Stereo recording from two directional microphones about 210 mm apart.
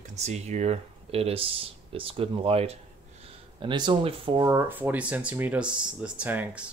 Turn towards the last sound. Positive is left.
turn(degrees=-5)  # may be behind; listen again after turning